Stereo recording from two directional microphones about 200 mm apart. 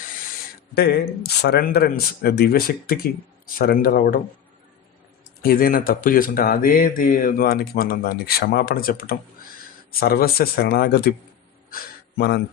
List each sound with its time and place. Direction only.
0.8 s speech: 55° left (ahead or behind)
5.4 s speech: 45° left (ahead or behind)
11.7 s gasp: 45° left (ahead or behind)